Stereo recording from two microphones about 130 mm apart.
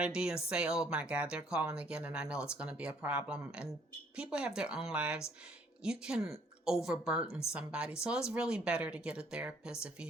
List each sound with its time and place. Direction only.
0.0 s speech: 5° right (ahead or behind)